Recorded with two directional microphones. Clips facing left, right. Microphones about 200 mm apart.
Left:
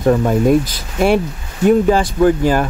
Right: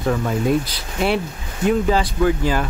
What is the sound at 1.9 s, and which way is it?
Speech, 45° left (ahead or behind).